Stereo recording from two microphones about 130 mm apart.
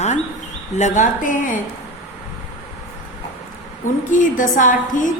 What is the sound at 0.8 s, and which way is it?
Speech, 70° left (ahead or behind).